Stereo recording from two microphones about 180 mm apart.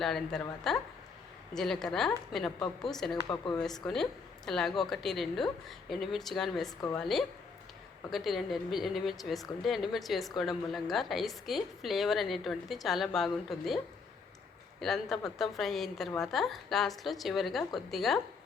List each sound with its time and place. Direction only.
0.0 s a woman's voice: 5° left (ahead or behind)
3.2 s speech: 20° left (ahead or behind)
3.6 s a woman's voice: 5° left (ahead or behind)
14.8 s a woman's voice: centre (ahead or behind)